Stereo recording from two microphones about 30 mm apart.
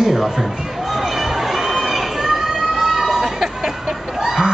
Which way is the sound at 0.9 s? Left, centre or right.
Centre.